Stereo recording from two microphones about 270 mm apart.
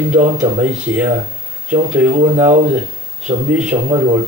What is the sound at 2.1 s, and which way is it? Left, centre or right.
Speech, right.